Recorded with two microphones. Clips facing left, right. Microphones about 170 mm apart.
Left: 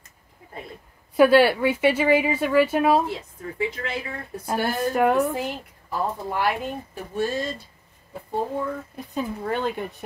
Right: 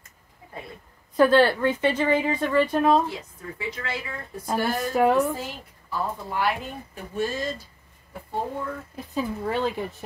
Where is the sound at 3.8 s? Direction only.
40° left (ahead or behind).